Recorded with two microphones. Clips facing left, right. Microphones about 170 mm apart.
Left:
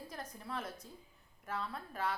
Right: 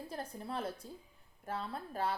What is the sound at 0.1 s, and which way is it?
Speech, 30° right (ahead or behind).